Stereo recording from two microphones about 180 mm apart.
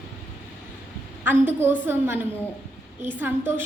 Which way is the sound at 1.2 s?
10° right (ahead or behind).